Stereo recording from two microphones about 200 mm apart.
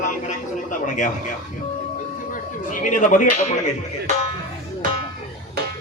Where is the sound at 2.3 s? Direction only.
40° left (ahead or behind).